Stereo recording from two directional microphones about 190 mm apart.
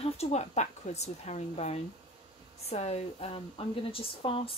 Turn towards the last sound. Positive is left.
turn(degrees=30)  # may be behind; listen again after turning